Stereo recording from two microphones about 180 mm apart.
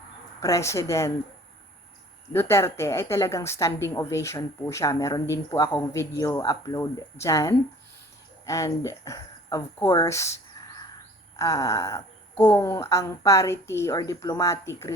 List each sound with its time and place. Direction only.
0.3 s speech: 15° left (ahead or behind)
2.3 s speech: 15° left (ahead or behind)